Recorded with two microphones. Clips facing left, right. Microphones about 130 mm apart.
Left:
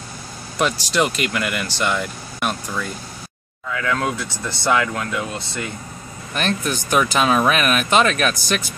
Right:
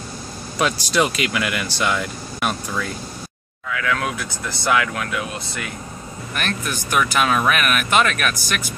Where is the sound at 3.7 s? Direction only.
25° left (ahead or behind).